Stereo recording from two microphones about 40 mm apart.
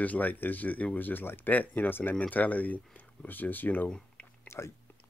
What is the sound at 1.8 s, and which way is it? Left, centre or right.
Speech, left.